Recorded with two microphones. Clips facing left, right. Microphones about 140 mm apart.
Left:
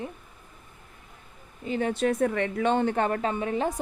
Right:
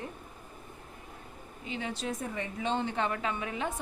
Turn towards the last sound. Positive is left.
turn(degrees=40)  # may be behind; listen again after turning